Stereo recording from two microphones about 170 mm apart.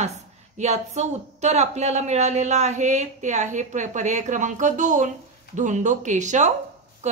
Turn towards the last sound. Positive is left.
turn(degrees=-45)  # may be behind; listen again after turning